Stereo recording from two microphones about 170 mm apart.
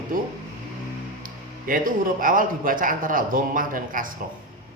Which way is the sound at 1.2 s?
55° right (ahead or behind).